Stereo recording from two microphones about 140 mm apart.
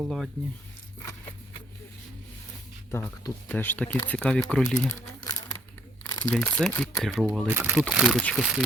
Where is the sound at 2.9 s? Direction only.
15° left (ahead or behind).